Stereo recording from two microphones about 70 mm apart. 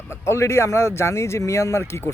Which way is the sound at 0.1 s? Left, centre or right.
Left.